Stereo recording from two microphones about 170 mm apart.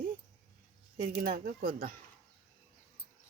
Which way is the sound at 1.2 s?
60° right (ahead or behind).